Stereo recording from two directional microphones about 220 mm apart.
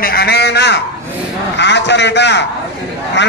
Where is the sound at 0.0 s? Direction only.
45° left (ahead or behind).